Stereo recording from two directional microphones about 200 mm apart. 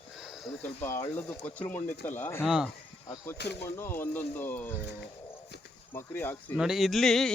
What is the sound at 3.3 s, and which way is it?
Speech, 55° left (ahead or behind).